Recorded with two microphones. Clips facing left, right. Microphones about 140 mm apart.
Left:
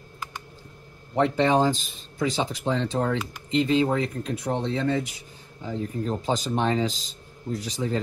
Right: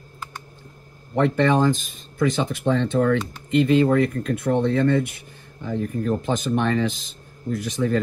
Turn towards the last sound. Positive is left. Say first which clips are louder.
# right 5 dB
turn(degrees=-50)  # may be behind; listen again after turning